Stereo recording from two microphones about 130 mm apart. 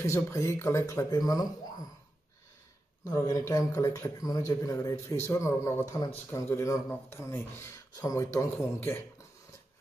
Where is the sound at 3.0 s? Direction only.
25° left (ahead or behind).